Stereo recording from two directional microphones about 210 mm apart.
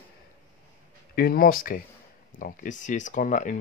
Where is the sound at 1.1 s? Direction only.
45° left (ahead or behind).